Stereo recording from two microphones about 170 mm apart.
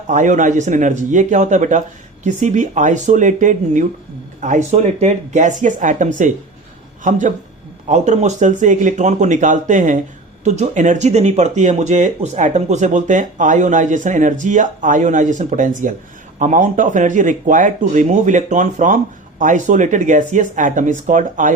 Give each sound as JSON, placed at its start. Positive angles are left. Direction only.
{"t": 0.1, "sound": "speech", "side_deg": -45}